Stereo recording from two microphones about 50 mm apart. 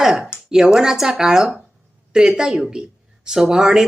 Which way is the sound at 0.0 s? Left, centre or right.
Centre.